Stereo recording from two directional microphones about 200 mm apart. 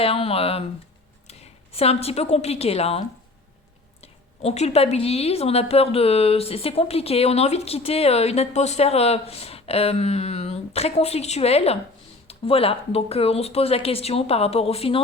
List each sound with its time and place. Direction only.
0.0 s a woman's voice: 30° left (ahead or behind)
4.0 s a woman's voice: 30° left (ahead or behind)